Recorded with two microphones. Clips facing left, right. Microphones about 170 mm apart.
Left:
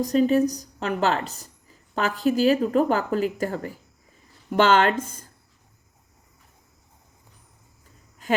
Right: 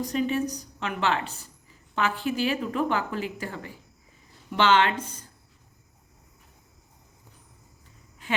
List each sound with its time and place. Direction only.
0.0 s a woman's voice: 40° left (ahead or behind)